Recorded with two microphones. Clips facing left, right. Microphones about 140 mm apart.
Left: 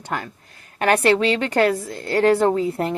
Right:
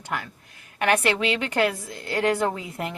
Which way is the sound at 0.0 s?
40° left (ahead or behind).